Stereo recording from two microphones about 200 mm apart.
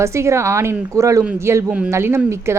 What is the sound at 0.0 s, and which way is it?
A woman's voice, 15° right (ahead or behind).